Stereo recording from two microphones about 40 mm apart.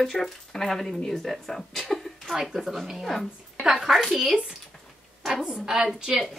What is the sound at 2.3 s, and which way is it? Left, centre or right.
A woman's voice, centre.